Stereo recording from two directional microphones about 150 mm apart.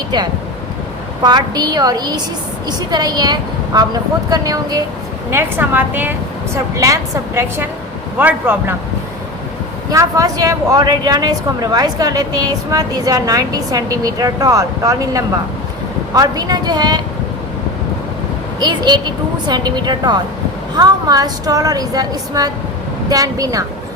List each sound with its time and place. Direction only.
1.2 s speech: 30° right (ahead or behind)
5.3 s a woman's voice: 15° right (ahead or behind)
9.9 s speech: 20° right (ahead or behind)
18.6 s speech: 30° right (ahead or behind)